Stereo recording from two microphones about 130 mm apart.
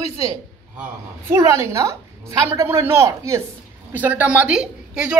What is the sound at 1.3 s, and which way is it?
A woman's voice, 25° right (ahead or behind).